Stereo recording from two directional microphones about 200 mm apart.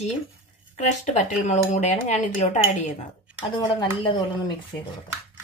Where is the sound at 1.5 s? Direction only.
35° left (ahead or behind).